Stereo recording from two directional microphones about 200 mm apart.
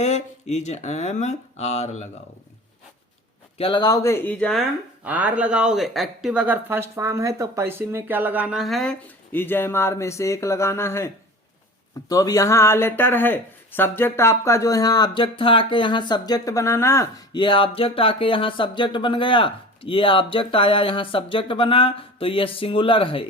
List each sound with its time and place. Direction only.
0.0 s speech: 35° left (ahead or behind)
3.6 s speech: 25° left (ahead or behind); by 4.6 s 5° left (ahead or behind)
5.0 s speech: 10° right (ahead or behind); by 23.2 s 25° left (ahead or behind)